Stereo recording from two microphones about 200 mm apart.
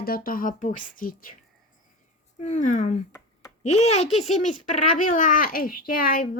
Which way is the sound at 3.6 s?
35° left (ahead or behind).